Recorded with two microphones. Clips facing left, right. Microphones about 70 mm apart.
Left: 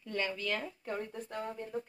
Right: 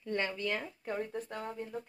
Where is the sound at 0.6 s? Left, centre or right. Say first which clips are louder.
Right 1 dB; centre.